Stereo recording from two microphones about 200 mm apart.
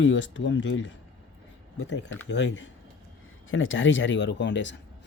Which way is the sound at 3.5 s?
75° left (ahead or behind).